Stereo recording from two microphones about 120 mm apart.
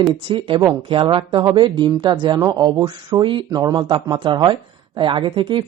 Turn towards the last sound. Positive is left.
turn(degrees=-40)  # may be behind; listen again after turning